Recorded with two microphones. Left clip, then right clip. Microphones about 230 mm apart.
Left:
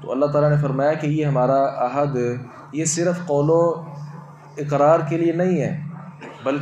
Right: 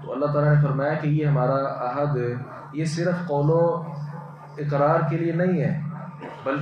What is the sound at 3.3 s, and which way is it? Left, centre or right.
Speech, left.